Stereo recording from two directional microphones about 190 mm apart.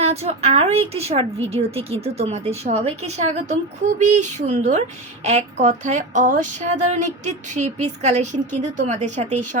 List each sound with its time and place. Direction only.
0.0 s a woman's voice: 35° right (ahead or behind)